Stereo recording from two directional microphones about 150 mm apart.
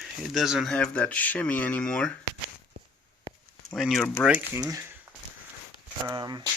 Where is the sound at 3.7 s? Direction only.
Centre (ahead or behind).